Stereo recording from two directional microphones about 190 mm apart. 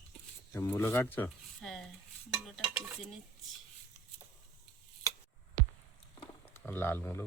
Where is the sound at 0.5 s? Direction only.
10° left (ahead or behind).